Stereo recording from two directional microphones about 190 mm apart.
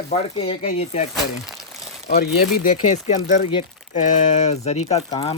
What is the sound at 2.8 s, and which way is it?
Speech, 40° left (ahead or behind).